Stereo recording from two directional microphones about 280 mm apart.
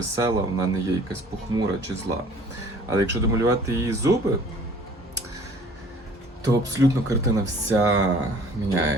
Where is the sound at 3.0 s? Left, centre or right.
Centre.